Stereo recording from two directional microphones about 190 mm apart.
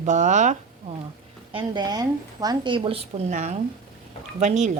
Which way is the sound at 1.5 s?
20° right (ahead or behind).